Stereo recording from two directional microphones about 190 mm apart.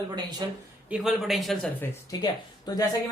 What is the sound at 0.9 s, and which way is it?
Speech, centre (ahead or behind).